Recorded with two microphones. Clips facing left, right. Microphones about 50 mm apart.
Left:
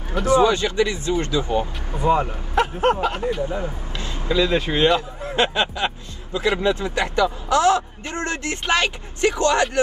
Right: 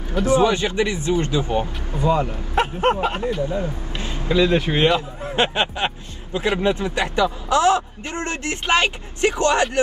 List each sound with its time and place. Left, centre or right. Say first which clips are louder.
0.3 s speech: left 1 dB; right
1.9 s speech: left 1 dB; left
2.5 s speech: even; right
3.4 s speech: right 2 dB; left
3.9 s speech: right 1 dB; right